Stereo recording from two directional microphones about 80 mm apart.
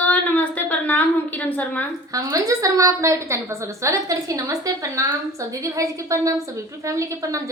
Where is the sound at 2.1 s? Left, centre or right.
Right.